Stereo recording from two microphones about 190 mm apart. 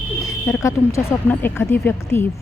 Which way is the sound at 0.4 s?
15° left (ahead or behind).